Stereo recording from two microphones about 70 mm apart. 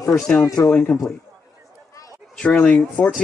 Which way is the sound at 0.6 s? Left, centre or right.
Left.